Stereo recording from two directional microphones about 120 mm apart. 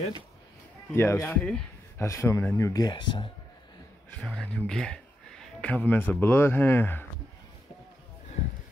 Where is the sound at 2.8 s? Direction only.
40° left (ahead or behind).